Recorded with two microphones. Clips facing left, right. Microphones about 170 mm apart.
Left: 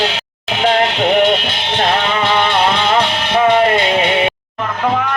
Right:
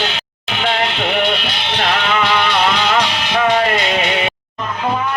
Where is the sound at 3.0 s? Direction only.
50° left (ahead or behind).